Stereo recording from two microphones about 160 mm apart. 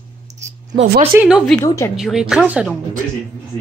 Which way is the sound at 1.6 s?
20° left (ahead or behind).